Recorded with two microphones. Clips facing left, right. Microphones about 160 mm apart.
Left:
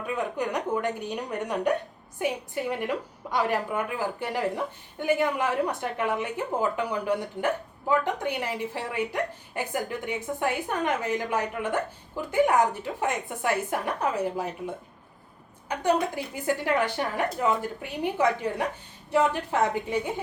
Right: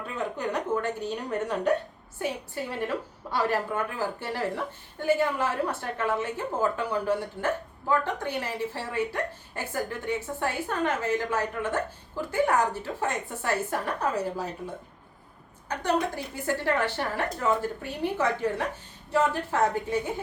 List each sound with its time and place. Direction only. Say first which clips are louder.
0.3 s a woman's voice: right 2 dB; 15° left (ahead or behind)
15.7 s a woman's voice: left 2 dB; 15° left (ahead or behind)